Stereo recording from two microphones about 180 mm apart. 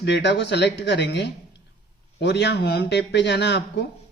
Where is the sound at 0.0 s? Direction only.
70° left (ahead or behind).